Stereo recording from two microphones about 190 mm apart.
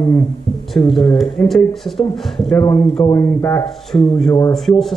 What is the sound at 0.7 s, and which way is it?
Speech, centre (ahead or behind).